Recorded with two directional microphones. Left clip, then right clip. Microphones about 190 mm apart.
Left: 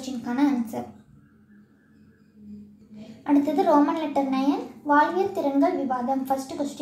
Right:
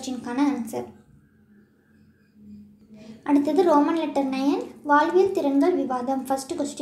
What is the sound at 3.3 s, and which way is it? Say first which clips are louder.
A woman's voice: right 1 dB; 20° right (ahead or behind).